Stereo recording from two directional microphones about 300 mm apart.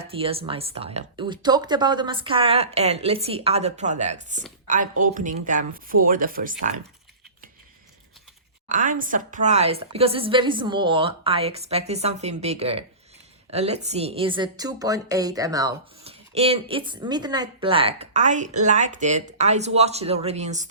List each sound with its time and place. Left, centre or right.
0.0 s speech: centre
8.7 s a woman's voice: right